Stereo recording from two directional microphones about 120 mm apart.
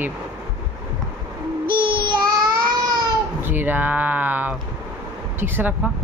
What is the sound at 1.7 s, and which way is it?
Child singing, 45° right (ahead or behind).